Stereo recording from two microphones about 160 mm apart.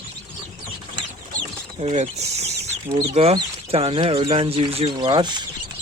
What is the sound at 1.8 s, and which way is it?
Speech, 40° right (ahead or behind).